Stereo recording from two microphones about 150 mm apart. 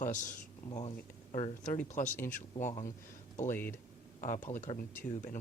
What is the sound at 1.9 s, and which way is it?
Speech, 60° left (ahead or behind).